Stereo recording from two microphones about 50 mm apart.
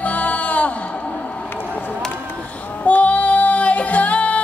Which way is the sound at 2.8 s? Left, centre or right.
Left.